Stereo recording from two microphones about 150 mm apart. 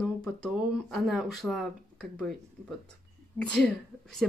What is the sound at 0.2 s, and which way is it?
Speech, 5° left (ahead or behind).